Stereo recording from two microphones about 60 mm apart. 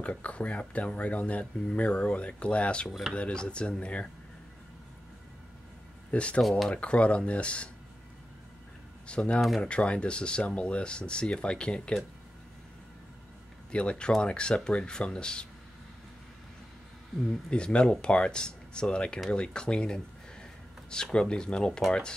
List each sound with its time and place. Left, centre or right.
0.0 s speech: left
2.9 s speech: centre
3.2 s speech: centre
6.1 s speech: centre
9.0 s speech: centre
13.7 s speech: centre
17.5 s speech: centre